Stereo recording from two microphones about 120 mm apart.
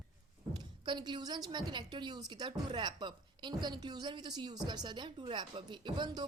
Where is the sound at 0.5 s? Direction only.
40° right (ahead or behind).